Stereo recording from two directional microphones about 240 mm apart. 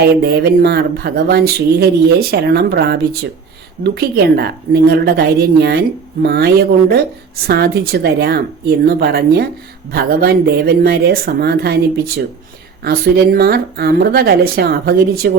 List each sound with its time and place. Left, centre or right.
0.2 s speech: right